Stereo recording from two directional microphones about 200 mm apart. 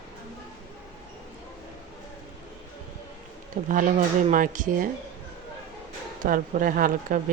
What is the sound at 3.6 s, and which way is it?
Speech, 40° right (ahead or behind).